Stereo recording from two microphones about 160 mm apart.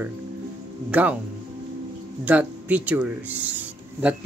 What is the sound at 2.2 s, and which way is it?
Speech, 10° right (ahead or behind).